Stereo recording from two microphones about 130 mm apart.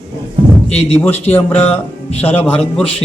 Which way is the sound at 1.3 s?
15° left (ahead or behind).